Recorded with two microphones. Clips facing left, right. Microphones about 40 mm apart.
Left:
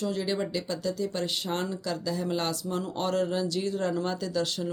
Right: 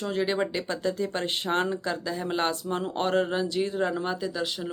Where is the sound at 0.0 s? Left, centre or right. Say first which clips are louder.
Right 3 dB; right.